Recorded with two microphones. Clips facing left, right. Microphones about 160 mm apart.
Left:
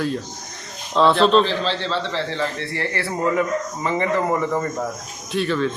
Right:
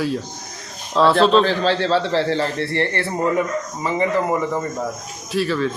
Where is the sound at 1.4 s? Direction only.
45° right (ahead or behind).